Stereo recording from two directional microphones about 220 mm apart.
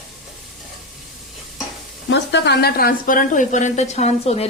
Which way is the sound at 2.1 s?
50° left (ahead or behind).